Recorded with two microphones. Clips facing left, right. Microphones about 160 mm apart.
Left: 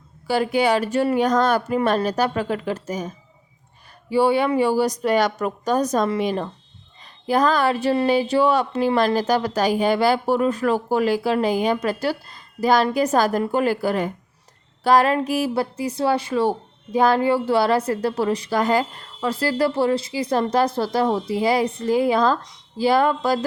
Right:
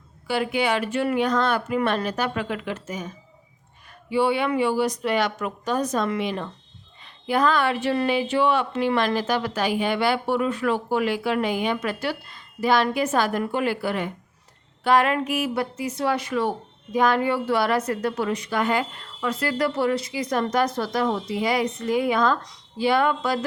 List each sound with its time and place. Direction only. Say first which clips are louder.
0.3 s speech: left 4 dB; 40° left (ahead or behind)
4.1 s speech: left 4 dB; 40° left (ahead or behind)